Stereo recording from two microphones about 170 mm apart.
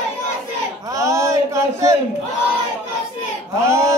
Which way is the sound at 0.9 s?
15° right (ahead or behind).